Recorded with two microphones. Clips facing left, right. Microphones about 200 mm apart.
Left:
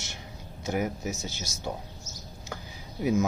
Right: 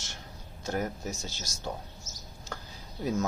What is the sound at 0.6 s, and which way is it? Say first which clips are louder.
Speech: left 3 dB; 10° left (ahead or behind).